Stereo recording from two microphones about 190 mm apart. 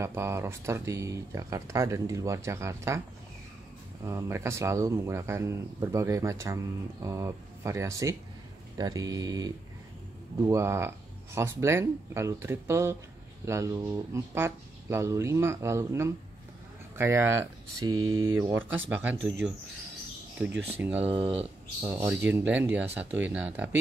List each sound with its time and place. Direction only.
0.0 s speech: 15° right (ahead or behind)
4.0 s speech: 15° right (ahead or behind)
17.9 s speech: 90° right
18.4 s speech: 10° right (ahead or behind)
19.1 s speech: 70° right (ahead or behind)
20.8 s speech: 10° right (ahead or behind)
21.1 s speech: 30° right (ahead or behind)
21.8 s speech: 10° right (ahead or behind)